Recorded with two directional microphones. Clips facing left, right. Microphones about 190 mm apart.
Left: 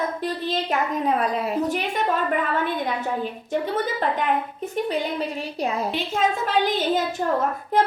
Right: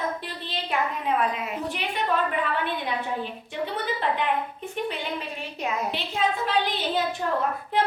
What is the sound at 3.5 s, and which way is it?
Speech, 45° left (ahead or behind).